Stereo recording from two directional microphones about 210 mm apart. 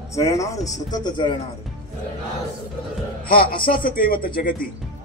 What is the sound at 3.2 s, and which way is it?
Speech, 40° left (ahead or behind).